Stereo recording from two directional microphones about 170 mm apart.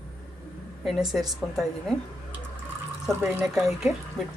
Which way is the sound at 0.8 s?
Centre (ahead or behind).